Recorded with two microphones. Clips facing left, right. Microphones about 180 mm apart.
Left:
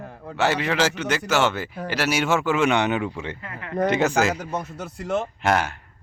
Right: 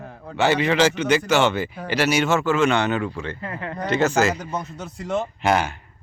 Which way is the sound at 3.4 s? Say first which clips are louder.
Right 4 dB; 35° right (ahead or behind).